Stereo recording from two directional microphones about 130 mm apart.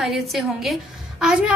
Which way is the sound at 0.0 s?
Centre (ahead or behind).